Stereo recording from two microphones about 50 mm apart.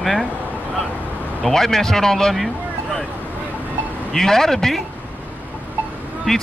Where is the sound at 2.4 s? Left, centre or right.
Centre.